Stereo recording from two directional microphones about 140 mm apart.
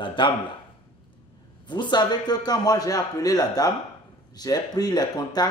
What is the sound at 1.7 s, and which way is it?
A man's voice, 35° left (ahead or behind).